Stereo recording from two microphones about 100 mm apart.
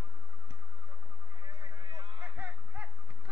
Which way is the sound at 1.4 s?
65° right (ahead or behind).